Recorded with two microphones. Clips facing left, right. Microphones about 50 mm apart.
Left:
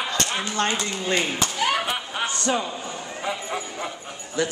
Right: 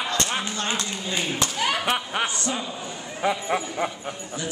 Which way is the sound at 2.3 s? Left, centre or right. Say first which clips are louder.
Left 4 dB; left.